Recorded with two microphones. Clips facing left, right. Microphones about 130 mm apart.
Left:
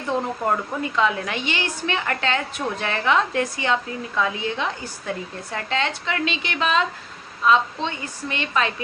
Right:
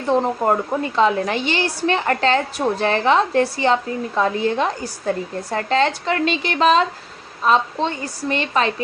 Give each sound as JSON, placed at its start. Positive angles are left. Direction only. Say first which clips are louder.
{"t": 0.1, "sound": "a woman's voice", "louder": "right 6 dB", "side_deg": -35}